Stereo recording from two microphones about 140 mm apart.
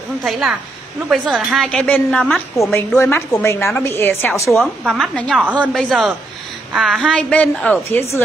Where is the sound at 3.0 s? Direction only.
20° left (ahead or behind).